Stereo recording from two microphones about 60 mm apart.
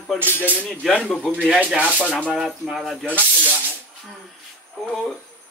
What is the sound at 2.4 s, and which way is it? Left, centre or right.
Speech, centre.